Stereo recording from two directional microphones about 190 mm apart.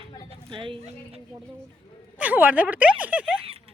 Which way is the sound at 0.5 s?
25° right (ahead or behind).